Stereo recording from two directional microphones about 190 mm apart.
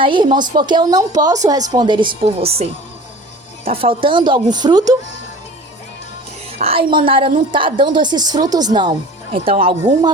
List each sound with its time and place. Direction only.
0.0 s speech: 25° right (ahead or behind)
6.6 s speech: 30° right (ahead or behind)